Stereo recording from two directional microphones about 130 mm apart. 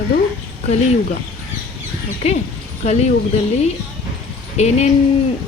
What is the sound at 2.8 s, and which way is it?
Speech, 60° left (ahead or behind).